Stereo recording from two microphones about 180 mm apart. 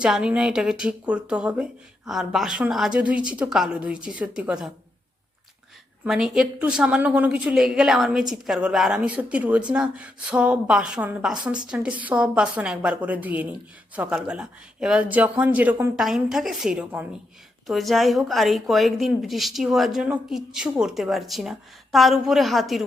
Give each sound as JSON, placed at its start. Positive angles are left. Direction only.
{"t": 0.0, "sound": "a woman's voice", "side_deg": -5}
{"t": 6.1, "sound": "a woman's voice", "side_deg": 0}